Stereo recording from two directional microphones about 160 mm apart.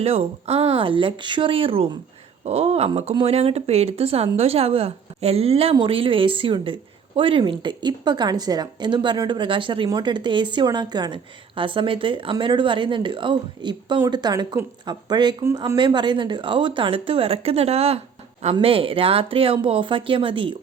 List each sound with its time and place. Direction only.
0.0 s a woman's voice: 40° right (ahead or behind)